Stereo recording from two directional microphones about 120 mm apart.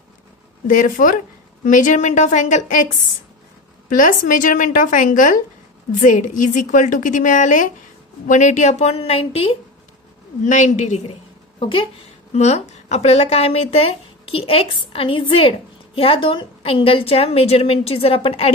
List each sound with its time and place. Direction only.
0.7 s a woman's voice: 90° left
3.9 s a woman's voice: 90° left; by 9.6 s 50° left (ahead or behind)
10.4 s a woman's voice: 90° left
11.6 s speech: 45° left (ahead or behind)
12.4 s speech: 70° left (ahead or behind); by 18.5 s 55° left (ahead or behind)